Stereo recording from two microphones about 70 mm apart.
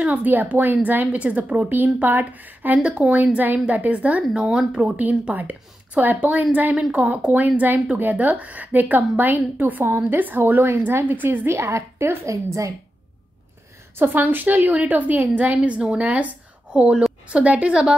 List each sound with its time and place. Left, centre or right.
0.0 s a woman's voice: right
4.9 s a woman's voice: right
13.9 s a woman's voice: right